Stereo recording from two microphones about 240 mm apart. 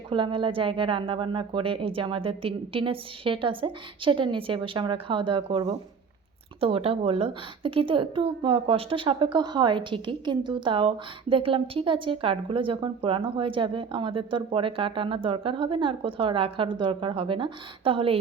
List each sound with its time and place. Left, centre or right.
0.1 s a woman's voice: right